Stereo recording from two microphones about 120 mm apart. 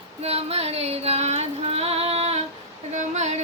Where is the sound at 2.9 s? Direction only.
80° right.